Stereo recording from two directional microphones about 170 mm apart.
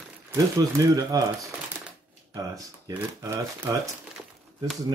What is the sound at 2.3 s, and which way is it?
Speech, 20° right (ahead or behind).